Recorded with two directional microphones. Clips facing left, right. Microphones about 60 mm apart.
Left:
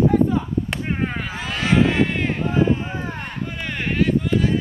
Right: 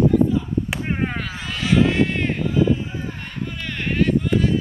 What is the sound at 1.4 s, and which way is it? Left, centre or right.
Vehicle, left.